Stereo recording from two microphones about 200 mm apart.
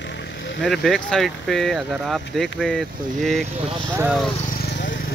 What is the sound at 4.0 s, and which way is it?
Speech, 5° right (ahead or behind).